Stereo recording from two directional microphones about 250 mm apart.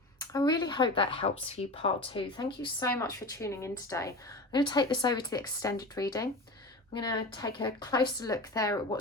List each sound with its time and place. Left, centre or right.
0.2 s speech: centre